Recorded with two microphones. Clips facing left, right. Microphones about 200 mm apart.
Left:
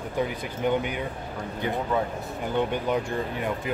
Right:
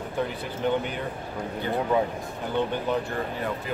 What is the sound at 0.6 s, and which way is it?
Speech, 10° left (ahead or behind).